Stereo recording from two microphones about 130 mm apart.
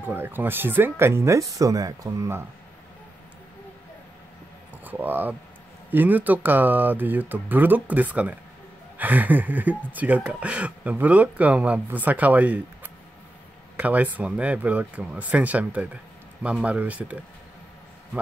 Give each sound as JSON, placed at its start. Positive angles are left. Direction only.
{"t": 0.0, "sound": "speech", "side_deg": -15}
{"t": 4.8, "sound": "speech", "side_deg": -15}